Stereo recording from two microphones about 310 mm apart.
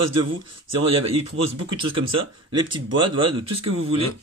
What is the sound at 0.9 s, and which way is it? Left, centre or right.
Speech, centre.